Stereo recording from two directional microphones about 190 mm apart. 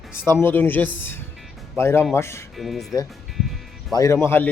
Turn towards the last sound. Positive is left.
turn(degrees=15)  # may be behind; listen again after turning